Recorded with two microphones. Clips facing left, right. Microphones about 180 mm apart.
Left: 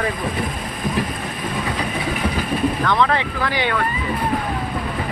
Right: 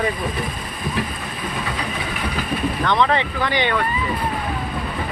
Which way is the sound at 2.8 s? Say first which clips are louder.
Even; centre (ahead or behind).